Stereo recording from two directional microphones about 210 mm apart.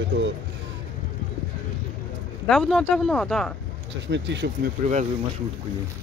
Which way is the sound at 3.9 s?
55° right (ahead or behind).